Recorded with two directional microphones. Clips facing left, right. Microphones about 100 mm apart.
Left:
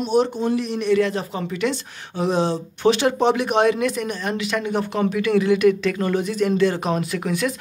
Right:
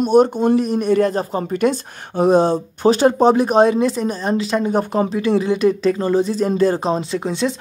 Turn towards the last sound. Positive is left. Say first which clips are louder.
# right 3 dB
turn(degrees=-25)  # may be behind; listen again after turning